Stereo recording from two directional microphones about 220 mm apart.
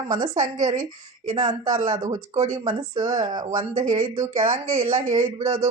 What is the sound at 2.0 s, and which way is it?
Speech, 30° right (ahead or behind).